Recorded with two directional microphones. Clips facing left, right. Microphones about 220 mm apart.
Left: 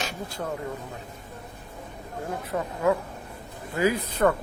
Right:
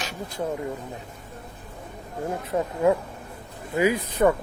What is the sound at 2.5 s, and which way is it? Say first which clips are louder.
Speech: right 3 dB; 25° right (ahead or behind).